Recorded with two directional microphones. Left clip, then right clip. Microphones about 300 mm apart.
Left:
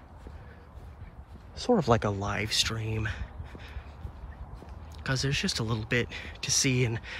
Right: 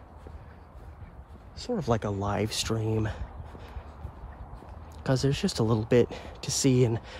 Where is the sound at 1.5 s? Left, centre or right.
Centre.